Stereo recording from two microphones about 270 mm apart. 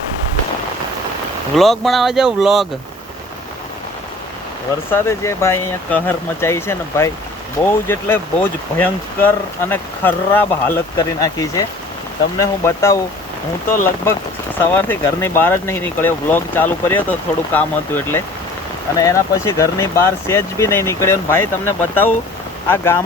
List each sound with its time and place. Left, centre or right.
1.5 s speech: centre
4.9 s speech: centre
22.7 s speech: centre